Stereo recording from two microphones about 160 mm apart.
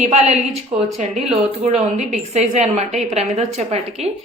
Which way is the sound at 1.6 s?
45° right (ahead or behind).